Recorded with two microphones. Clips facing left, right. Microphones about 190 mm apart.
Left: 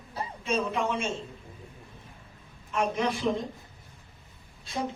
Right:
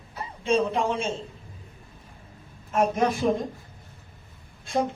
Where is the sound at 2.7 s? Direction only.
45° right (ahead or behind).